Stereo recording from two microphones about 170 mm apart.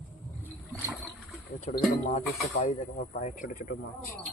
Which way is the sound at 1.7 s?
40° left (ahead or behind).